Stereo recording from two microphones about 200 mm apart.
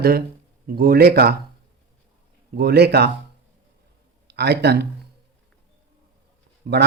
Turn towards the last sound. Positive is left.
turn(degrees=-50)  # may be behind; listen again after turning